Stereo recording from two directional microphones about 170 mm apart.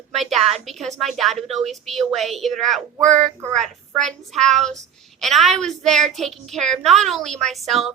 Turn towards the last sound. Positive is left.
turn(degrees=0)  # may be behind; listen again after turning